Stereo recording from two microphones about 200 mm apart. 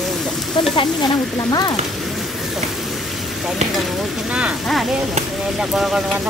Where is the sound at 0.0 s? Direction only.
Centre (ahead or behind).